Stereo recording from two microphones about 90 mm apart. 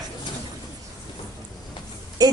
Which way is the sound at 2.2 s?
45° right (ahead or behind).